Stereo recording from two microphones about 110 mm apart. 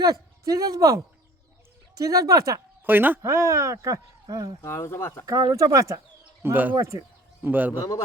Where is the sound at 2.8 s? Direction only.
15° right (ahead or behind); by 4.5 s 35° right (ahead or behind).